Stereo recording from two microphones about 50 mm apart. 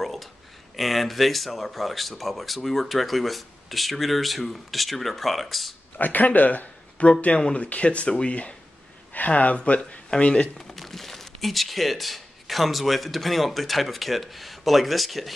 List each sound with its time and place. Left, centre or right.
0.0 s a sound: centre
0.7 s speech: centre
5.9 s speech: left; by 10.5 s centre
10.6 s speech: centre